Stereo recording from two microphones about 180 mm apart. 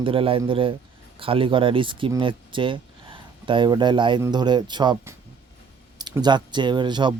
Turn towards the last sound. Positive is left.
turn(degrees=-25)  # may be behind; listen again after turning